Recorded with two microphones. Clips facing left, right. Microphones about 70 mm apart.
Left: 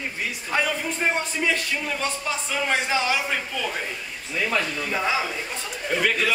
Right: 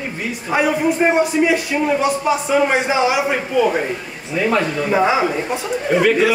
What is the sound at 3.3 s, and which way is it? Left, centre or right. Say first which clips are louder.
Speech: right 11 dB; right.